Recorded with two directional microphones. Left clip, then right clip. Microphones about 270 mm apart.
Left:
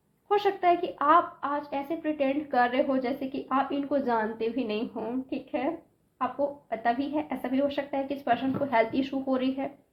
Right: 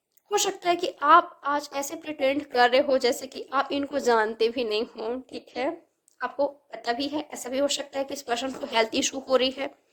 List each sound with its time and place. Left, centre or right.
0.3 s a woman's voice: right
6.8 s a woman's voice: right